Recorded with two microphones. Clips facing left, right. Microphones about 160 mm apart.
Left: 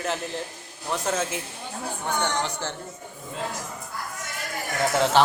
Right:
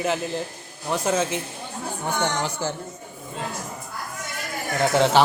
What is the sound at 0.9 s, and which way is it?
Speech, centre (ahead or behind).